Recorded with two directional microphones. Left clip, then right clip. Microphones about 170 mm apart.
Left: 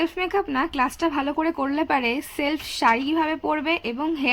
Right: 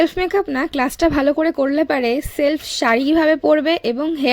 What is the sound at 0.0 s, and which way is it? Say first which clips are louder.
Speech: right 7 dB; 30° right (ahead or behind).